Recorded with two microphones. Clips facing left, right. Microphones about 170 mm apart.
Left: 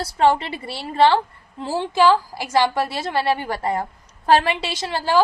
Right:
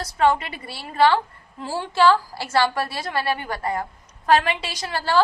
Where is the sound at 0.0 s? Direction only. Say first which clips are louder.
Left 2 dB; 30° left (ahead or behind).